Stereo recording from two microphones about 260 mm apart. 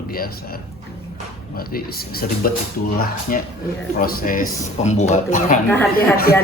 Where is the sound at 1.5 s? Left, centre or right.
Left.